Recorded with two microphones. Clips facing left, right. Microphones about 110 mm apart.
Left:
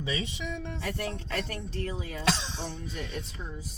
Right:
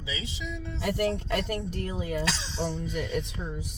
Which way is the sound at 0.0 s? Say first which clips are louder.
Left 3 dB; 55° left (ahead or behind).